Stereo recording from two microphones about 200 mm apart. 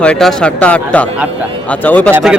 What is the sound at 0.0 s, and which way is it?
A man's voice, 5° left (ahead or behind).